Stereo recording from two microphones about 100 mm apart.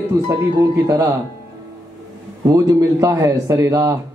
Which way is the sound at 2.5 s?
35° right (ahead or behind).